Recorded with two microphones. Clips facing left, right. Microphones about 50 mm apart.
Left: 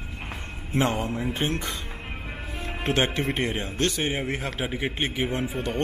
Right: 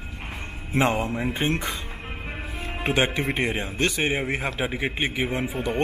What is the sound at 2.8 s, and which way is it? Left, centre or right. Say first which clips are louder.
Speech: right 1 dB; centre.